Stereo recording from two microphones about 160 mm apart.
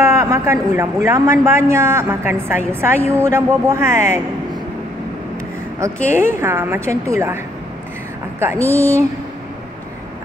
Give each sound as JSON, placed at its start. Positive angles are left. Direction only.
{"t": 0.0, "sound": "a man's voice", "side_deg": -20}
{"t": 6.1, "sound": "a man's voice", "side_deg": -15}
{"t": 8.6, "sound": "a man's voice", "side_deg": -20}